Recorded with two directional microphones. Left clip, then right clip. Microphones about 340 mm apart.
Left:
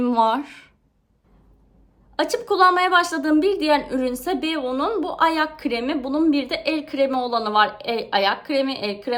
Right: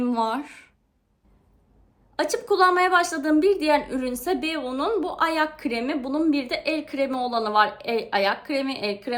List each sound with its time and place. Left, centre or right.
0.0 s speech: centre
2.1 s a woman's voice: centre